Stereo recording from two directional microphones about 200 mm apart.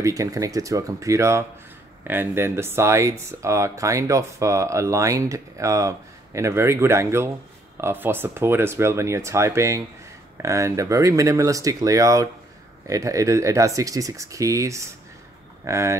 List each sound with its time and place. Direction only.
0.0 s speech: 15° right (ahead or behind)